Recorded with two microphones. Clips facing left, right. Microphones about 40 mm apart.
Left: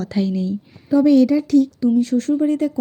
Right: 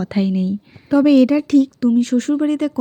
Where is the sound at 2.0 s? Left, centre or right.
Right.